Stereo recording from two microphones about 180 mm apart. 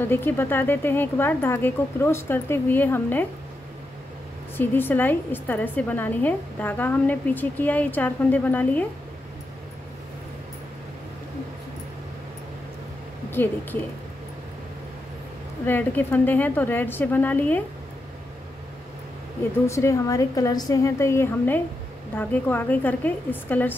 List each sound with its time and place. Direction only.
0.1 s a woman's voice: 10° left (ahead or behind)
4.6 s a woman's voice: 10° left (ahead or behind)
13.3 s speech: 10° left (ahead or behind)
15.6 s a woman's voice: 10° left (ahead or behind)
19.6 s a woman's voice: 15° left (ahead or behind)